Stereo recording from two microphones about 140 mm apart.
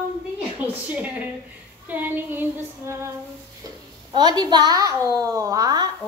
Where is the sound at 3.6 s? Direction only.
30° right (ahead or behind).